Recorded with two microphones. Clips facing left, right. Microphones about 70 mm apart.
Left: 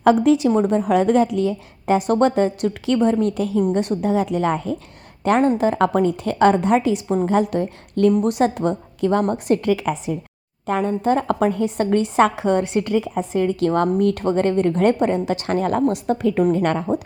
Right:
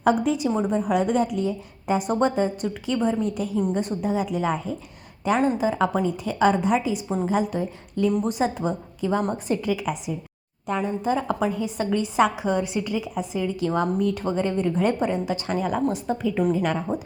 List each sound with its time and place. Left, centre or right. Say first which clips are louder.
0.0 s a woman's voice: left 6 dB; left
5.2 s a woman's voice: left 5 dB; left
5.5 s a woman's voice: left 5 dB; left
10.7 s a woman's voice: left 5 dB; left